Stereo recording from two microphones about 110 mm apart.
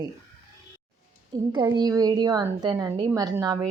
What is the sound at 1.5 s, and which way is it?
A woman's voice, 40° right (ahead or behind).